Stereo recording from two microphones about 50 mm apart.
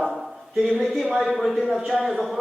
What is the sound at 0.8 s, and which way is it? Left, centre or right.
Speech, centre.